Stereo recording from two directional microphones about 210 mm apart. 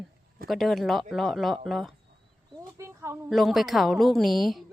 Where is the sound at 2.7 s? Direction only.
15° right (ahead or behind).